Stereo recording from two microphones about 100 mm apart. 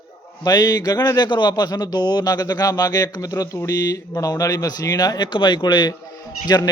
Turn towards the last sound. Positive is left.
turn(degrees=40)  # may be behind; listen again after turning